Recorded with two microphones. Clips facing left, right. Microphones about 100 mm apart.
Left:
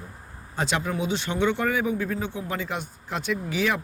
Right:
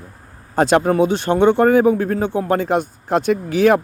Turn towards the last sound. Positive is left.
turn(degrees=-50)  # may be behind; listen again after turning